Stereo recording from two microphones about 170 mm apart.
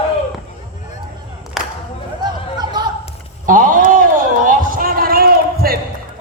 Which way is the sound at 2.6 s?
25° right (ahead or behind).